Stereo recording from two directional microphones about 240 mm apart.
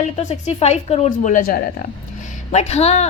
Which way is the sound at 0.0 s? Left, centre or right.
Left.